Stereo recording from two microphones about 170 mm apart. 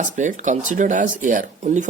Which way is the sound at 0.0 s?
45° right (ahead or behind).